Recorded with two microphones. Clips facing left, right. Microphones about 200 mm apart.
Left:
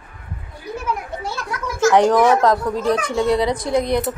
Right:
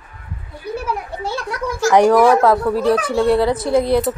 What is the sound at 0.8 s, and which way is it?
Children playing, 35° right (ahead or behind).